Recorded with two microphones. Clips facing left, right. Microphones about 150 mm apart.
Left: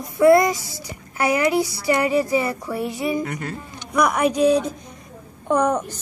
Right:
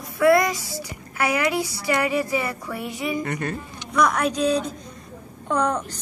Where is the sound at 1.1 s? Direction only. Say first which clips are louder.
Left 4 dB; 35° left (ahead or behind).